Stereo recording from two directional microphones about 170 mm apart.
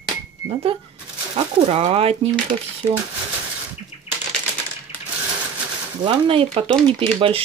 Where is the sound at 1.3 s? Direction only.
35° right (ahead or behind).